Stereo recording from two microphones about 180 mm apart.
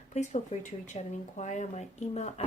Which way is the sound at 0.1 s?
40° left (ahead or behind).